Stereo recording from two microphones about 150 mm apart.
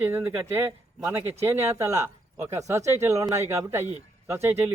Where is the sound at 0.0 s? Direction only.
15° right (ahead or behind).